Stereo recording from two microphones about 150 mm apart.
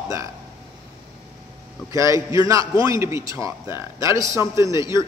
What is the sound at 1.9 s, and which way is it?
A man's voice, 20° right (ahead or behind).